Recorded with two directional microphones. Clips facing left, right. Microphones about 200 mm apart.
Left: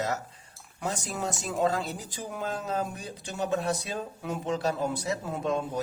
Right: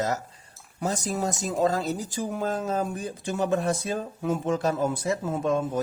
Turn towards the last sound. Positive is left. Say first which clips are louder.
# right 4 dB
turn(degrees=-50)  # may be behind; listen again after turning